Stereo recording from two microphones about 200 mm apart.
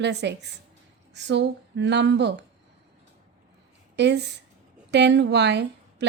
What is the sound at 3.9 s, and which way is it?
A woman's voice, 55° right (ahead or behind).